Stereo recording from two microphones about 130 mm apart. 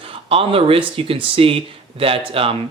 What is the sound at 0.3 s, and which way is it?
Speech, 45° right (ahead or behind).